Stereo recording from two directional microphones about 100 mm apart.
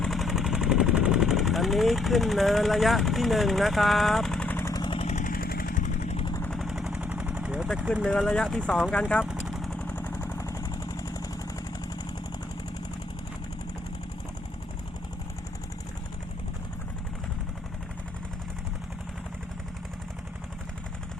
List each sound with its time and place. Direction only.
0.0 s speech: centre (ahead or behind)
4.4 s vehicle: 25° left (ahead or behind)
4.7 s vehicle: 45° left (ahead or behind)
6.7 s machine gun: 5° right (ahead or behind)
7.0 s vehicle: 10° right (ahead or behind)
7.8 s speech: 10° right (ahead or behind)
8.0 s speech: 5° left (ahead or behind)
9.2 s vehicle: 5° right (ahead or behind)
9.6 s vehicle: 15° left (ahead or behind)
10.3 s vehicle: 30° left (ahead or behind)